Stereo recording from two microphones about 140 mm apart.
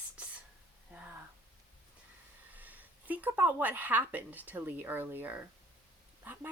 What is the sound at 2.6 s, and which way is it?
Speech, 10° right (ahead or behind).